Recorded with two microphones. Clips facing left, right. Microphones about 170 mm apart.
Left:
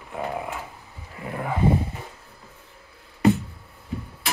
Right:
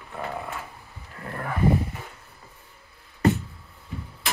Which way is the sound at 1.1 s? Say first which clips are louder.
Left 3 dB; 10° left (ahead or behind).